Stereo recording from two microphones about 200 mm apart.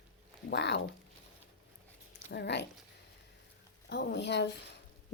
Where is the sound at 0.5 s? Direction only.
60° left (ahead or behind).